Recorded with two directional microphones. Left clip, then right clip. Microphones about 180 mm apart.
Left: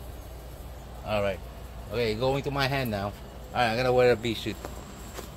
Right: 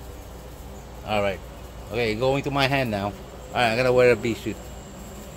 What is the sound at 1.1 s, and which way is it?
Speech, 25° right (ahead or behind).